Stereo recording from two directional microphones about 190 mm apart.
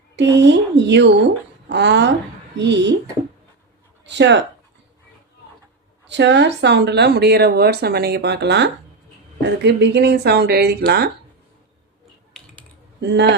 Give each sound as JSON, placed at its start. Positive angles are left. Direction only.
{"t": 0.2, "sound": "speech", "side_deg": -65}
{"t": 4.0, "sound": "speech", "side_deg": -65}
{"t": 6.1, "sound": "speech", "side_deg": -65}
{"t": 13.0, "sound": "speech", "side_deg": -65}